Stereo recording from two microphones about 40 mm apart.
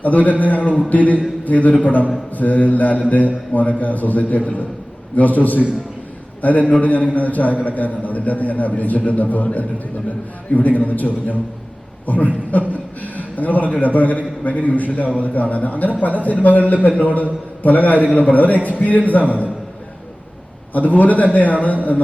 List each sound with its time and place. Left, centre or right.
0.0 s a man's voice: left
12.5 s a sound: left
13.7 s a man's voice: left
20.7 s a man's voice: left